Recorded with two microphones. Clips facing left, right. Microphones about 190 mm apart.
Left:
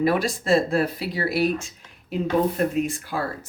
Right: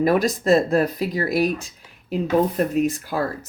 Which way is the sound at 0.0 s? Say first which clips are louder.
Right 3 dB; 45° right (ahead or behind).